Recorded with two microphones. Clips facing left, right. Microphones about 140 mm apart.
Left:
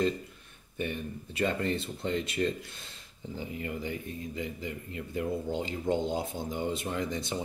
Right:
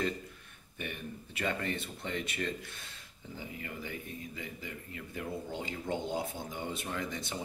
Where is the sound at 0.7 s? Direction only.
30° left (ahead or behind).